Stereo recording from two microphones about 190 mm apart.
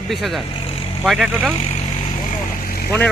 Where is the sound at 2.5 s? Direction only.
50° left (ahead or behind).